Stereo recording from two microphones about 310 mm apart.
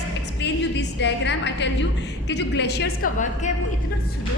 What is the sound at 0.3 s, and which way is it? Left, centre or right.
A woman's voice, left.